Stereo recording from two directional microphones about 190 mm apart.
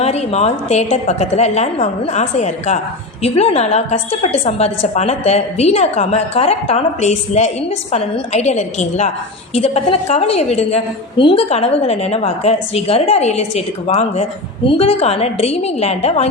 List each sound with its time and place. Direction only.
0.0 s a woman's voice: 35° left (ahead or behind)